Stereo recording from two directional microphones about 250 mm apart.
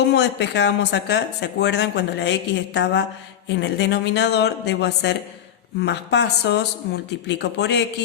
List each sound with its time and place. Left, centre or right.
0.0 s speech: left